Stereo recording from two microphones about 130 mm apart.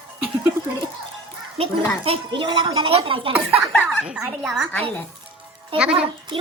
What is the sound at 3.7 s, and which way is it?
Speech, 10° left (ahead or behind).